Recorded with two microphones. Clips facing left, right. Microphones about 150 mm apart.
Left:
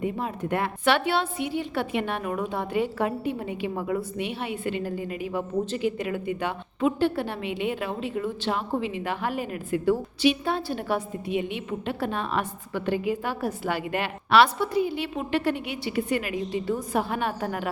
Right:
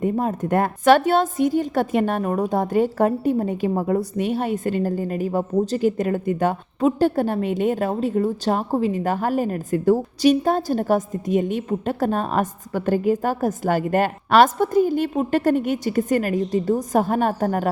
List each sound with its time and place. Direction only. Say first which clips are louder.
0.0 s a woman's voice: right 7 dB; 45° right (ahead or behind)